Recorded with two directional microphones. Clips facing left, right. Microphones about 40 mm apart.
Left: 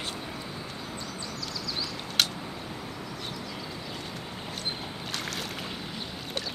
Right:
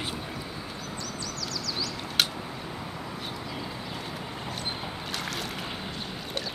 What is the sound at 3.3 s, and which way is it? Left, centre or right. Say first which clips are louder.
Vehicle: right 2 dB; centre.